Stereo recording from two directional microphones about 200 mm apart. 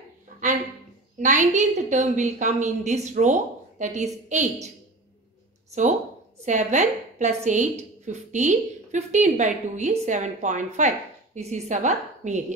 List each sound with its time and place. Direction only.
1.2 s a woman's voice: 40° right (ahead or behind)
6.4 s a woman's voice: 35° right (ahead or behind)